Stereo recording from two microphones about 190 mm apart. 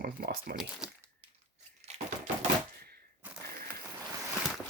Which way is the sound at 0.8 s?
5° right (ahead or behind).